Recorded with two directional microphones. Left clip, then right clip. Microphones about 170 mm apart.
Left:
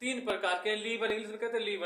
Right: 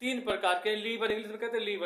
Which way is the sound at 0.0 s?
30° right (ahead or behind).